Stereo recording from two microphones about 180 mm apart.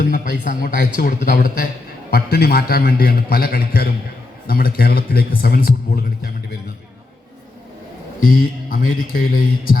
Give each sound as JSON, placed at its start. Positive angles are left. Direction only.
{"t": 0.0, "sound": "a man's voice", "side_deg": 50}
{"t": 8.3, "sound": "speech", "side_deg": 50}